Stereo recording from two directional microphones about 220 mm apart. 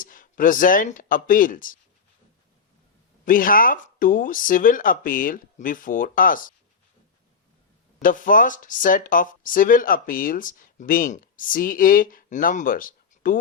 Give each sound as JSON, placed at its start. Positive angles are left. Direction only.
{"t": 0.0, "sound": "speech", "side_deg": 40}
{"t": 3.2, "sound": "speech", "side_deg": 40}
{"t": 8.0, "sound": "speech", "side_deg": 40}